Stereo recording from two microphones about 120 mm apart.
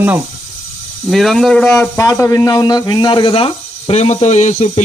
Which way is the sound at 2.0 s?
25° left (ahead or behind).